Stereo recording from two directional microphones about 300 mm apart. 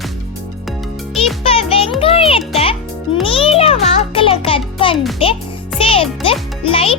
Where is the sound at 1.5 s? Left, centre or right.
Centre.